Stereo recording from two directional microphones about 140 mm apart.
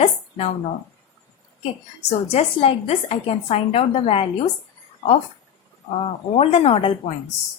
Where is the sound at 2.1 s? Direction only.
45° left (ahead or behind).